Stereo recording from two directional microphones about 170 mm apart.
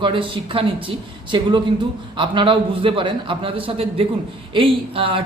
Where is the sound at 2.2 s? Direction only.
30° right (ahead or behind).